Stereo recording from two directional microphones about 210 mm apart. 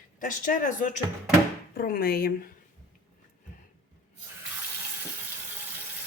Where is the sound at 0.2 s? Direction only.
40° left (ahead or behind).